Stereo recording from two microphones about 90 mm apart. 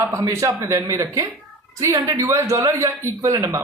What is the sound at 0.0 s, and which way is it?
A man's voice, 35° right (ahead or behind).